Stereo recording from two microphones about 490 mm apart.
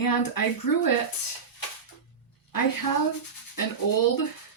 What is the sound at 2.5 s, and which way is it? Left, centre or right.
Speech, left.